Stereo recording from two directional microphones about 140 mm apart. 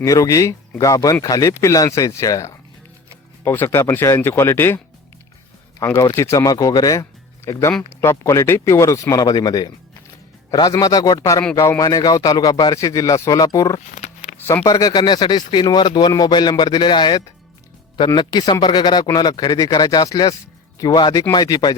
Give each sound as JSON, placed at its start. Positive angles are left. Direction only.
{"t": 0.0, "sound": "a man's voice", "side_deg": 25}
{"t": 5.8, "sound": "a man's voice", "side_deg": 15}
{"t": 13.9, "sound": "a sound", "side_deg": 60}
{"t": 14.3, "sound": "a man's voice", "side_deg": 20}